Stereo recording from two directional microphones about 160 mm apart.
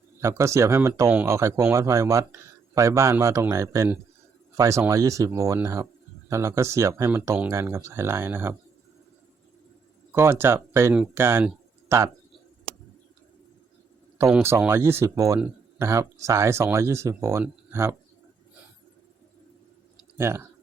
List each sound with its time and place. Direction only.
0.2 s speech: 20° right (ahead or behind)
10.1 s speech: 15° right (ahead or behind)
14.6 s speech: 15° right (ahead or behind)
20.1 s speech: 15° right (ahead or behind)